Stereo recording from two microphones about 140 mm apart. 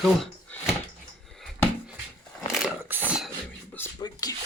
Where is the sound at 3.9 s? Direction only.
30° left (ahead or behind).